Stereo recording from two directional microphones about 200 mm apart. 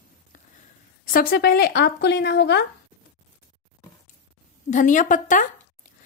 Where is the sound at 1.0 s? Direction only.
45° left (ahead or behind).